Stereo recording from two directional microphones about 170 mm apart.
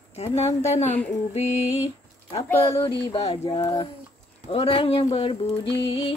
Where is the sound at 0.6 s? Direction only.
40° left (ahead or behind).